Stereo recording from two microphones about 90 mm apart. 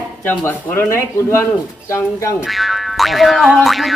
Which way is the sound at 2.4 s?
Centre (ahead or behind).